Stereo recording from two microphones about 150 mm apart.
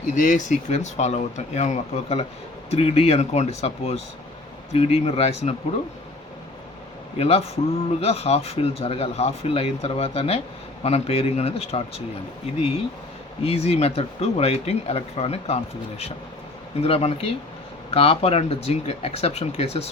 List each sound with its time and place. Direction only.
0.1 s speech: 55° left (ahead or behind)
7.2 s speech: 40° left (ahead or behind)